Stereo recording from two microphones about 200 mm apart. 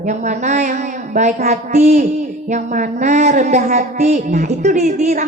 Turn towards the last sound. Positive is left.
turn(degrees=-35)  # may be behind; listen again after turning